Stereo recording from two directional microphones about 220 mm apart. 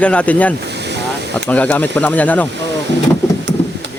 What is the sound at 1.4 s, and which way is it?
Speech, 5° left (ahead or behind).